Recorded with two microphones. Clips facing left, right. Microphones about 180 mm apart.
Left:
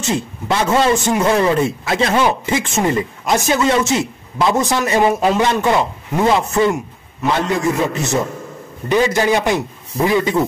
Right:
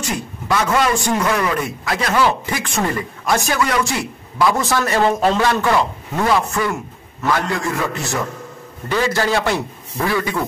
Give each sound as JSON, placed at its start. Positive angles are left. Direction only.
{"t": 0.0, "sound": "a man's voice", "side_deg": 25}